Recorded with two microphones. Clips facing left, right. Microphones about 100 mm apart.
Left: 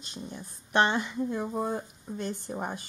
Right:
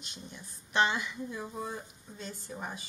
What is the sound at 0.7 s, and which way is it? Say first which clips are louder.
Speech: left 4 dB; 50° left (ahead or behind).